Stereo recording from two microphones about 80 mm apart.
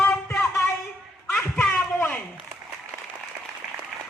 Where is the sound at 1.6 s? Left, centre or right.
Centre.